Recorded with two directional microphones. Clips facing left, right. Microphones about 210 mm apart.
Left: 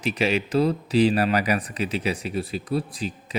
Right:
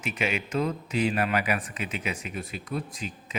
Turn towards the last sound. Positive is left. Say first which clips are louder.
# left 6 dB
turn(degrees=35)  # may be behind; listen again after turning